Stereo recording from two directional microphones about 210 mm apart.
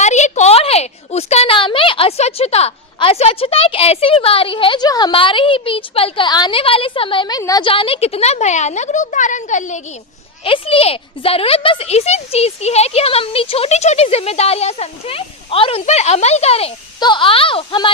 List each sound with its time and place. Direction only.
0.0 s a woman's voice: 35° left (ahead or behind)